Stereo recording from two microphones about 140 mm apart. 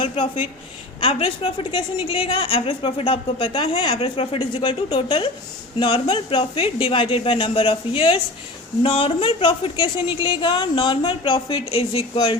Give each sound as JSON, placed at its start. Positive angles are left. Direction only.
{"t": 0.0, "sound": "a woman's voice", "side_deg": 40}